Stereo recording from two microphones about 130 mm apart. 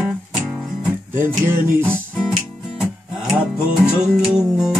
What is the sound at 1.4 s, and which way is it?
Music, 20° right (ahead or behind).